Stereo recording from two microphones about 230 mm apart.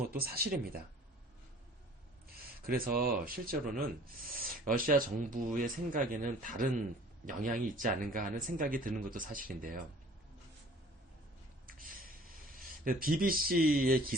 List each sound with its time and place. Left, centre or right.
0.1 s speech: right
2.6 s speech: right
11.6 s a sound: right